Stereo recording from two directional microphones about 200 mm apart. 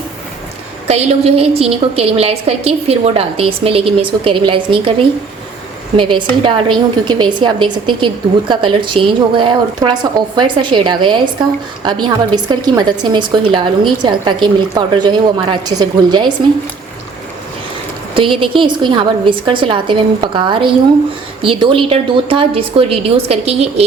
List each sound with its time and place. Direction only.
0.9 s a woman's voice: 30° right (ahead or behind)
18.1 s a woman's voice: 25° right (ahead or behind)